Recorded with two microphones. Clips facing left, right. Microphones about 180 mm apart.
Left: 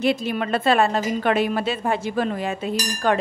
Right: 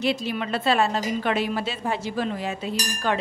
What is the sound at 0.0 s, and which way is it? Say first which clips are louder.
A woman's voice: left 4 dB; 50° left (ahead or behind).